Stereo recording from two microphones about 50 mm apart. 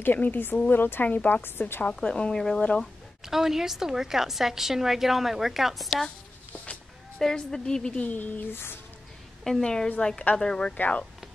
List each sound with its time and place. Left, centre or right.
0.0 s a woman's voice: left
1.0 s a woman's voice: left
1.9 s a woman's voice: centre
3.3 s a woman's voice: centre
7.2 s a woman's voice: centre
8.0 s a woman's voice: left
9.4 s a woman's voice: centre
10.8 s speech: left